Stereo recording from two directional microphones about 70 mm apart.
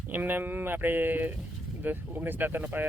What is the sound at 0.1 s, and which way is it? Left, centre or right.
Speech, right.